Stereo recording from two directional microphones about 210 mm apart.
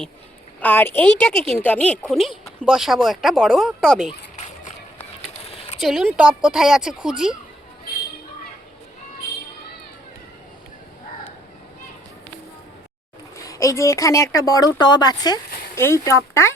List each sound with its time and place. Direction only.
0.6 s a woman's voice: 10° left (ahead or behind)
4.4 s run: 35° left (ahead or behind)
5.8 s speech: centre (ahead or behind)
13.3 s speech: 15° left (ahead or behind)